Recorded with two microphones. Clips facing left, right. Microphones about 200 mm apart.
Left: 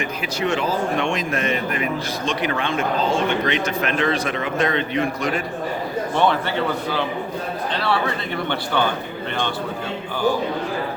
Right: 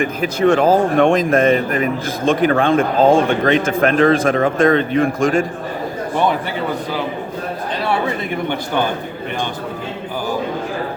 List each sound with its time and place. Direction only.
0.0 s speech: 55° right (ahead or behind)
8.4 s a man's voice: 10° right (ahead or behind)